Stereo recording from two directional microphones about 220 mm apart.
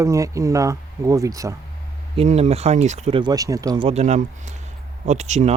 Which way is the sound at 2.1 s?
25° right (ahead or behind).